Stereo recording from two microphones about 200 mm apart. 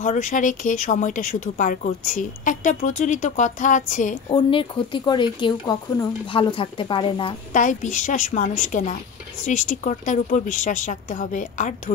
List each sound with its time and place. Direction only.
0.0 s speech: 40° left (ahead or behind)
4.3 s speech: 25° left (ahead or behind)
7.5 s speech: 40° left (ahead or behind)